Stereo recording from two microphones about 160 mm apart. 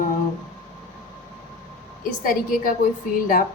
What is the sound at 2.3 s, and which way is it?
Speech, 60° left (ahead or behind).